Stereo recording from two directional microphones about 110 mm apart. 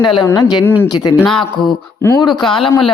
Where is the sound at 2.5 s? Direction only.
50° left (ahead or behind).